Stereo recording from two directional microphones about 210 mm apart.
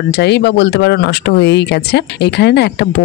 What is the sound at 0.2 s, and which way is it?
Speech, 55° left (ahead or behind).